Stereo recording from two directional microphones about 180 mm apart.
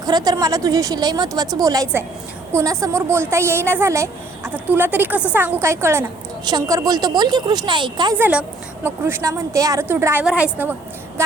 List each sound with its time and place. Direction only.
0.0 s a woman's voice: 20° right (ahead or behind)
8.2 s a woman's voice: 10° right (ahead or behind)